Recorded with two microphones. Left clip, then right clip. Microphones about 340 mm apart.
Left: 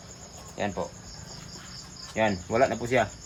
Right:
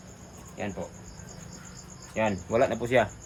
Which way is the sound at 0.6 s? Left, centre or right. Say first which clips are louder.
Left 5 dB; centre.